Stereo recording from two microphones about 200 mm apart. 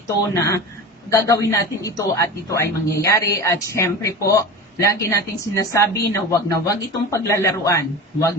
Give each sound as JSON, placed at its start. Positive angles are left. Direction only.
{"t": 0.3, "sound": "a man's voice", "side_deg": 15}